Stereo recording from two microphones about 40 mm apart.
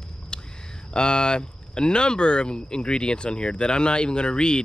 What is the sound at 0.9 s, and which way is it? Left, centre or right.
Speech, left.